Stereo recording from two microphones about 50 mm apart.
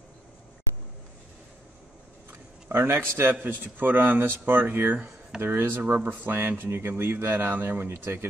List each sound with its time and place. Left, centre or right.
2.7 s speech: right
3.3 s speech: right